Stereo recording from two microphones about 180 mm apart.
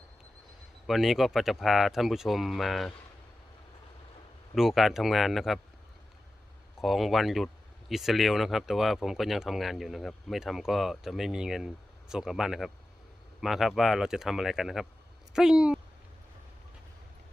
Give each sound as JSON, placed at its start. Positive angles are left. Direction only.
{"t": 0.9, "sound": "speech", "side_deg": 0}
{"t": 4.5, "sound": "speech", "side_deg": 0}
{"t": 6.8, "sound": "speech", "side_deg": 0}